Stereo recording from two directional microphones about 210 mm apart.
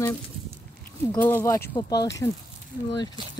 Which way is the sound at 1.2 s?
10° left (ahead or behind).